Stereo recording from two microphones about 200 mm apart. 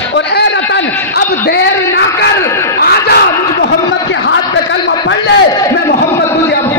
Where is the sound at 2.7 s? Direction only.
55° left (ahead or behind).